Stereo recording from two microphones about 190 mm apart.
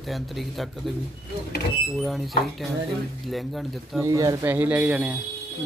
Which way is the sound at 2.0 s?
Centre (ahead or behind).